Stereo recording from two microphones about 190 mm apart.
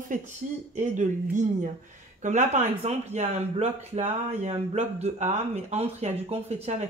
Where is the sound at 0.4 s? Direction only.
40° right (ahead or behind).